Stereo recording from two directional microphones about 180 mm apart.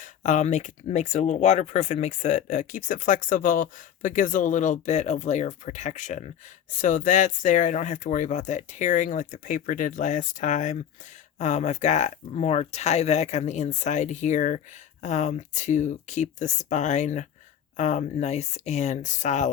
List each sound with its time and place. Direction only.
0.0 s speech: 45° left (ahead or behind)